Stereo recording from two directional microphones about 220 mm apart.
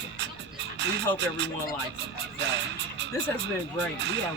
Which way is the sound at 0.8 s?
55° right (ahead or behind).